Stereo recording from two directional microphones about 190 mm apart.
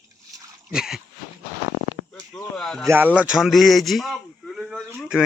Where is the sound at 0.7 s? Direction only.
Centre (ahead or behind).